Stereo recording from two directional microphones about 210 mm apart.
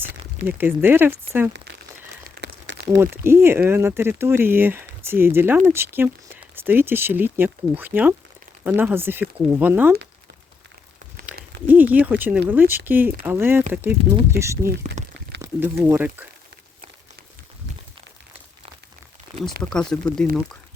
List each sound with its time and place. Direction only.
0.4 s speech: 10° right (ahead or behind)
2.4 s crumpling: 55° right (ahead or behind)
3.0 s speech: 10° right (ahead or behind)
11.6 s speech: 10° right (ahead or behind)
19.7 s speech: 5° left (ahead or behind)